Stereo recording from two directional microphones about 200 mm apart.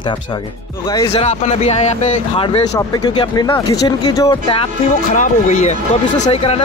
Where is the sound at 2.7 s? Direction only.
20° left (ahead or behind).